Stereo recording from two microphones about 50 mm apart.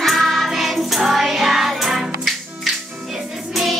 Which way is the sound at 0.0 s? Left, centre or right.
Centre.